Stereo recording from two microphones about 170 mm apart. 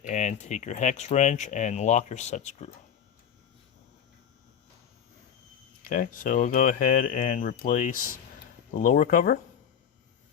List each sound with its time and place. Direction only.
0.0 s speech: 45° left (ahead or behind)
5.8 s speech: 55° left (ahead or behind)